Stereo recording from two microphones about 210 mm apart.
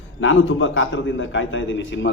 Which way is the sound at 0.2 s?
65° left (ahead or behind).